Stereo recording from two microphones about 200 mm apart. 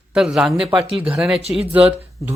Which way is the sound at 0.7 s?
25° right (ahead or behind).